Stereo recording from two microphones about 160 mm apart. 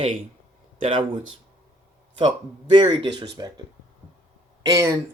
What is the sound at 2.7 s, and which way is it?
Speech, 30° right (ahead or behind).